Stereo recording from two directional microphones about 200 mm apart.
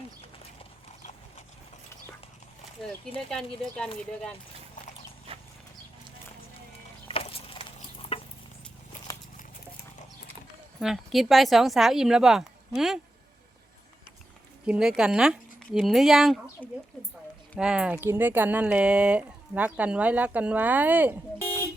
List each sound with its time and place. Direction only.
3.2 s speech: centre (ahead or behind)
5.3 s horse: 30° right (ahead or behind)
7.1 s a sound: 30° left (ahead or behind)
10.8 s speech: centre (ahead or behind)
14.7 s speech: 5° right (ahead or behind)